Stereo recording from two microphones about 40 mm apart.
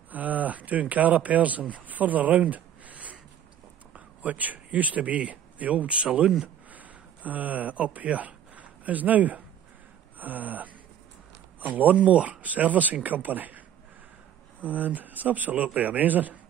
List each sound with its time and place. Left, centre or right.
0.1 s speech: right
1.9 s a sound: right
3.9 s speech: right
6.7 s speech: right
10.1 s gasp: right
11.6 s speech: right
14.7 s speech: right